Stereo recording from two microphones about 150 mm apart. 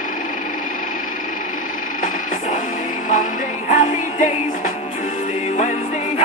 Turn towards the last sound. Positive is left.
turn(degrees=50)  # may be behind; listen again after turning